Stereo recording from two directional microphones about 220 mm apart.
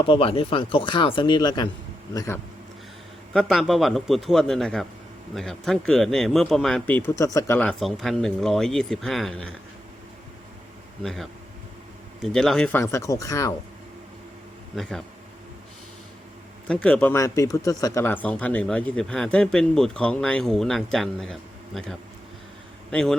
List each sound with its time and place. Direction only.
0.1 s speech: 25° left (ahead or behind)
3.3 s speech: centre (ahead or behind)
11.0 s speech: centre (ahead or behind)
14.8 s speech: centre (ahead or behind)
16.6 s speech: 5° left (ahead or behind)
22.9 s speech: 5° left (ahead or behind)